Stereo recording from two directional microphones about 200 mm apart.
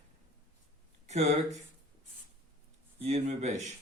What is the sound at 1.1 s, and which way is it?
Speech, 35° right (ahead or behind).